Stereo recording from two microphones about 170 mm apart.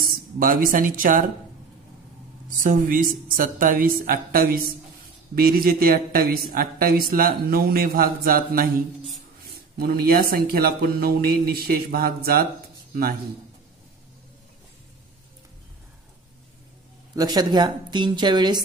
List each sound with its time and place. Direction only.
0.1 s speech: 55° right (ahead or behind)
2.6 s speech: 55° right (ahead or behind)
17.1 s a woman's voice: 20° right (ahead or behind)